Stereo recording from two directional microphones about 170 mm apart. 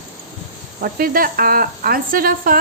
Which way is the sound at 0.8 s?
55° right (ahead or behind).